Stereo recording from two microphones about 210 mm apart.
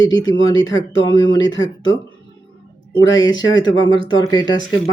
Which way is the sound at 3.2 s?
20° left (ahead or behind).